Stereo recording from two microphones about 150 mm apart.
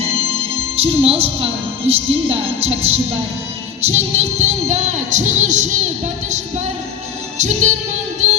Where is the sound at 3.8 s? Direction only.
45° right (ahead or behind).